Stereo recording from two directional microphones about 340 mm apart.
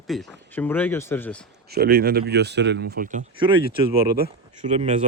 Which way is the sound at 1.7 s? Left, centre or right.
Right.